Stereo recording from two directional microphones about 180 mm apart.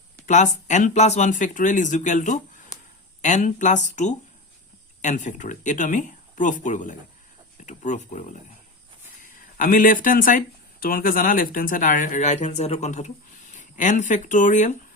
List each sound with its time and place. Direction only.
0.3 s speech: 45° left (ahead or behind)